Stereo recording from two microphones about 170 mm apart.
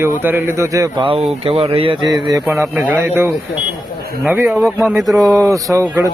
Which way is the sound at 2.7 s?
10° right (ahead or behind).